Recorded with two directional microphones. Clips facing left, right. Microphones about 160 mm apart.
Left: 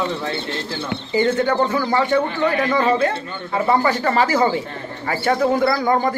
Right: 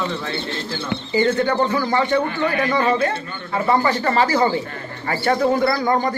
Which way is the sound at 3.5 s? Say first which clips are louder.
Left 1 dB; 10° left (ahead or behind).